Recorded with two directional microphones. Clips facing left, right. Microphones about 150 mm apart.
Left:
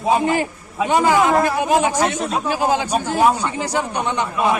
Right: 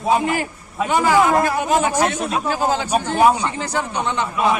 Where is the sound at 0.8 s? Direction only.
20° left (ahead or behind).